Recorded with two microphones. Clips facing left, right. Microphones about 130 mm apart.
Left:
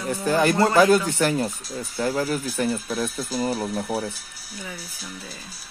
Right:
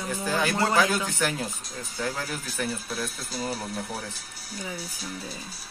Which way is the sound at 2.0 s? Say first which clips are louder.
Left 8 dB; 50° left (ahead or behind).